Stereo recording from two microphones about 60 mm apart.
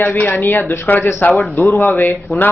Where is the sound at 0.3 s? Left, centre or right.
Left.